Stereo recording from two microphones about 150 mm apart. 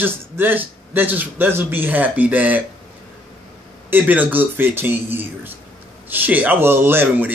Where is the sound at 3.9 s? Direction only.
10° right (ahead or behind).